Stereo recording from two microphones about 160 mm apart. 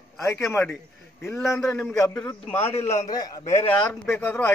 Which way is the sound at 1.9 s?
20° left (ahead or behind).